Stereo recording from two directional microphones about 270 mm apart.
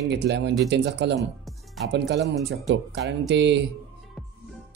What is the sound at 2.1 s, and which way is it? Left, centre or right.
Speech, right.